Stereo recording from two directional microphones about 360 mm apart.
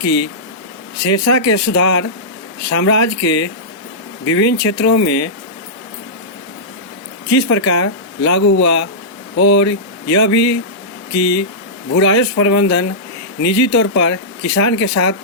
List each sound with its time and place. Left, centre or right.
0.0 s speech: left
7.3 s speech: left